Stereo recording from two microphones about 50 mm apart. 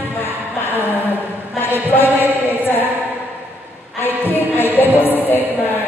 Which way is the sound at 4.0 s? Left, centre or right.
Left.